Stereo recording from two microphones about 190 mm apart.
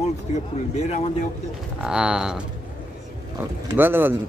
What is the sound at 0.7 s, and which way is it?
Speech, 35° left (ahead or behind).